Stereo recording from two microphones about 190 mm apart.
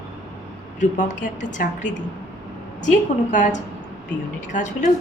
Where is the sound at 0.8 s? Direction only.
40° left (ahead or behind).